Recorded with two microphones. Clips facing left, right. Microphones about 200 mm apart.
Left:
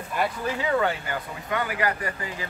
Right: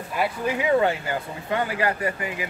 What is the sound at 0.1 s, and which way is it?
Speech, 5° right (ahead or behind).